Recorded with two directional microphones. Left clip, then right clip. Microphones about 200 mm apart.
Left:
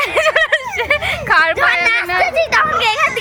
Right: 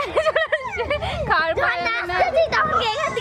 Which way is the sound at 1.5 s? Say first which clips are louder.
Left 7 dB; centre (ahead or behind).